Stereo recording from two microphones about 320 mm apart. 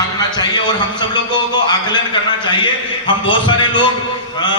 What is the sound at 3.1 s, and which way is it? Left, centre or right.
A man's voice, centre.